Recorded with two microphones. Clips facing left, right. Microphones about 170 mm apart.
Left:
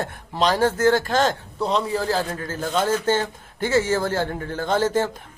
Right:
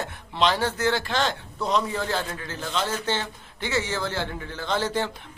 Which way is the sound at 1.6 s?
30° left (ahead or behind).